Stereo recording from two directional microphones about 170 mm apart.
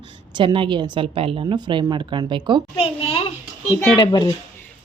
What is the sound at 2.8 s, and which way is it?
A child's voice, 35° left (ahead or behind).